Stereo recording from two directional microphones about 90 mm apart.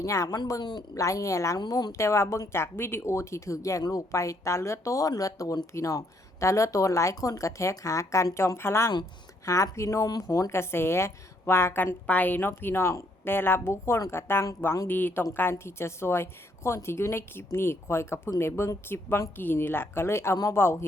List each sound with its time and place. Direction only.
0.0 s speech: 35° left (ahead or behind)
0.6 s a woman's voice: 55° left (ahead or behind)
0.9 s speech: 35° left (ahead or behind)
1.5 s speech: 45° left (ahead or behind); by 20.8 s 30° left (ahead or behind)